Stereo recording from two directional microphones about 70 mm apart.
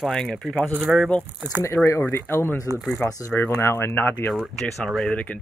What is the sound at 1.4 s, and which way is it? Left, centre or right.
Speech, right.